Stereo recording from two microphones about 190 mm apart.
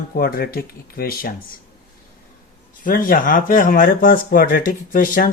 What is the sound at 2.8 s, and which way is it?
Speech, 50° left (ahead or behind).